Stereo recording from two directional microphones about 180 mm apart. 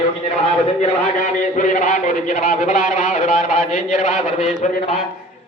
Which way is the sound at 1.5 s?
45° left (ahead or behind).